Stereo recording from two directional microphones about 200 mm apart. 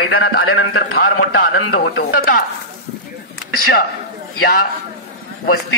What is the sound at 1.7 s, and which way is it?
Speech, 50° left (ahead or behind).